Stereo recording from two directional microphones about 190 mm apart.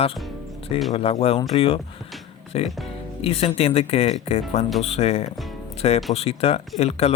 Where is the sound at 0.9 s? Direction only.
30° left (ahead or behind).